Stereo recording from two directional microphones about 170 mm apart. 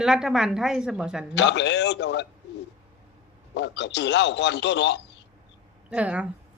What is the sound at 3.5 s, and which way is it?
Speech, 90° left.